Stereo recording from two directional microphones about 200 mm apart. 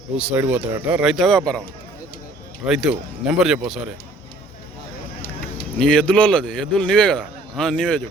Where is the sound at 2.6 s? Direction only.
5° right (ahead or behind).